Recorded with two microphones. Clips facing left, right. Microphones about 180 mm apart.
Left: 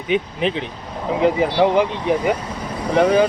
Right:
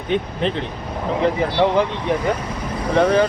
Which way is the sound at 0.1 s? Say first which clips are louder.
Left 1 dB; 5° left (ahead or behind).